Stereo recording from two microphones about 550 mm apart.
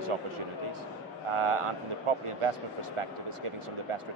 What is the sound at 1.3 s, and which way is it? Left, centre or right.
Speech, right.